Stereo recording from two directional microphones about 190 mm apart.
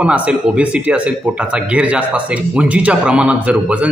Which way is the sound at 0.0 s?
5° right (ahead or behind).